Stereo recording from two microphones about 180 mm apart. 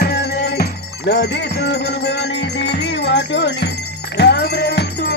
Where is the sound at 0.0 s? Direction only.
65° left (ahead or behind).